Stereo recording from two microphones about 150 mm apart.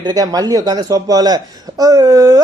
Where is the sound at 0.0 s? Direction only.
25° right (ahead or behind).